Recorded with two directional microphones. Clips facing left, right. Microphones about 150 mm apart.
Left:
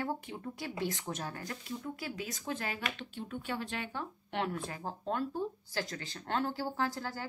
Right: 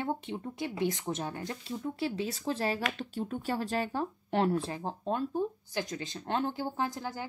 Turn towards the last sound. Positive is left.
turn(degrees=-20)  # may be behind; listen again after turning